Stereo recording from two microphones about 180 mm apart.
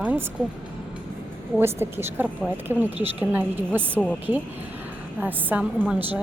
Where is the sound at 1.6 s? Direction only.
15° right (ahead or behind).